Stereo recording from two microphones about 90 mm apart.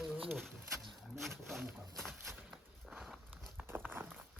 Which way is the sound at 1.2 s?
Centre (ahead or behind).